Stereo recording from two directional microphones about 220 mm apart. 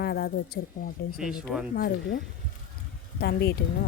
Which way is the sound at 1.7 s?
50° left (ahead or behind).